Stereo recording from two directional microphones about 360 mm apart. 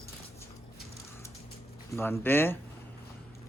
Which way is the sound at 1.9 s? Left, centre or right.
Centre.